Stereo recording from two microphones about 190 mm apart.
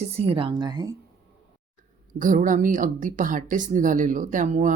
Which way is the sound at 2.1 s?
45° right (ahead or behind).